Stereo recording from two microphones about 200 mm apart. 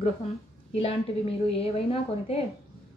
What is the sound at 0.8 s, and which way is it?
A woman's voice, 30° left (ahead or behind).